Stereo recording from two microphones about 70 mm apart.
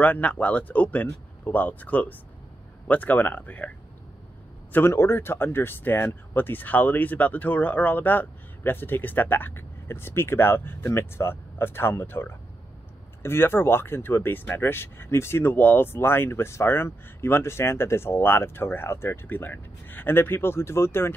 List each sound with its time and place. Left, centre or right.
0.0 s speech: centre
4.7 s speech: left